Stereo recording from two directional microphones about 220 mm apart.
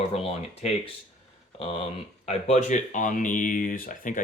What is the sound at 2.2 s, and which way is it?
Speech, 30° left (ahead or behind).